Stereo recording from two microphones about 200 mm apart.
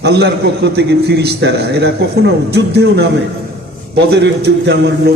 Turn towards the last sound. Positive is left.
turn(degrees=-55)  # may be behind; listen again after turning